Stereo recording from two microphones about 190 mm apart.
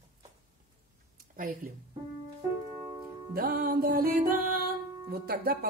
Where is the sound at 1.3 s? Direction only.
50° right (ahead or behind).